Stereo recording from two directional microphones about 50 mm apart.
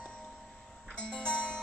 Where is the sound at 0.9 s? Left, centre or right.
Centre.